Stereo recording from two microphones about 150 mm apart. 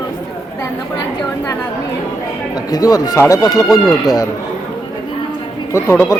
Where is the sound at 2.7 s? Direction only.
25° left (ahead or behind).